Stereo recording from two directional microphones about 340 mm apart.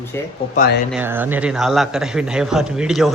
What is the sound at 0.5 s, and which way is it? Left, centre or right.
Speech, left.